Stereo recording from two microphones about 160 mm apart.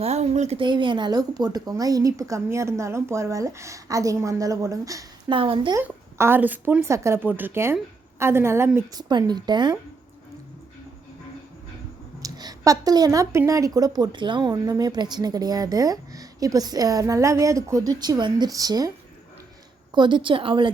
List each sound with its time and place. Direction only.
0.0 s speech: 45° right (ahead or behind)
0.6 s a woman's voice: 30° right (ahead or behind)
5.3 s a woman's voice: 35° right (ahead or behind)
5.7 s a woman's voice: 15° right (ahead or behind)
12.2 s a woman's voice: 25° right (ahead or behind)
19.9 s a woman's voice: 30° right (ahead or behind)